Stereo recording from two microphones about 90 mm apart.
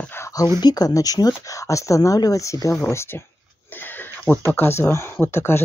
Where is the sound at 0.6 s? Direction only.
50° left (ahead or behind); by 3.3 s 30° left (ahead or behind).